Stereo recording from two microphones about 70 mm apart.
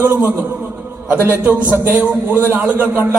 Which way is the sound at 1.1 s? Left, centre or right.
Right.